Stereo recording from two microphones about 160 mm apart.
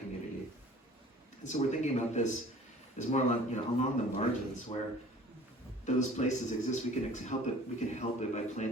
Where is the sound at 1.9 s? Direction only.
45° left (ahead or behind).